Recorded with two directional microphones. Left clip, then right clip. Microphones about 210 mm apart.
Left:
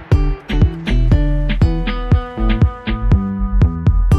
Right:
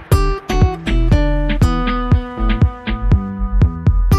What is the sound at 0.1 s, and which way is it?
Music, centre (ahead or behind).